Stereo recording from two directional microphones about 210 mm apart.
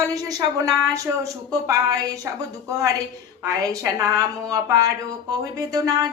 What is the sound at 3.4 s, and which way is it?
Speech, 15° right (ahead or behind).